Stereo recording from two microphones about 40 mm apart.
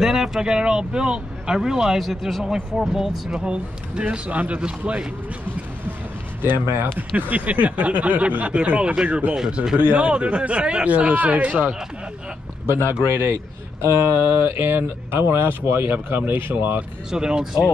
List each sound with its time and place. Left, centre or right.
0.0 s speech: centre
2.0 s speech: centre
4.1 s speech: right
6.4 s speech: right
7.0 s speech: right
9.8 s speech: right
10.0 s speech: right
12.6 s speech: left
13.7 s speech: right
16.2 s speech: right
17.1 s speech: centre